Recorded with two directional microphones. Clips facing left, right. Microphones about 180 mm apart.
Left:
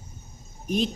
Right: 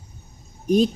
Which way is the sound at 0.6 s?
40° right (ahead or behind).